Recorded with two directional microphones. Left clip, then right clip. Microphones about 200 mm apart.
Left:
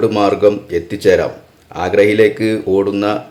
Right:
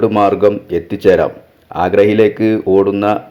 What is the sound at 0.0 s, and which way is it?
Speech, 15° right (ahead or behind).